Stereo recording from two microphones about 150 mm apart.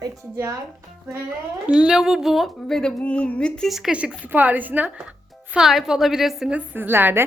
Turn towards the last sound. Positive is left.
turn(degrees=-15)  # may be behind; listen again after turning